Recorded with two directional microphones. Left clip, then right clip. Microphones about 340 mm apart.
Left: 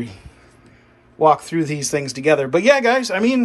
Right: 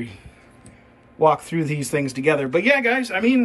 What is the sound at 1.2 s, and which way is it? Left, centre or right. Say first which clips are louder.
A man's voice: left 3 dB; centre.